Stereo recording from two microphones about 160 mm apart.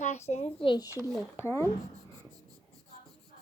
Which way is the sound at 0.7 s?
25° left (ahead or behind).